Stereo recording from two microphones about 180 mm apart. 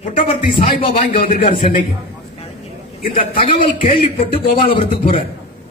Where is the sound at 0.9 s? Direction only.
50° left (ahead or behind).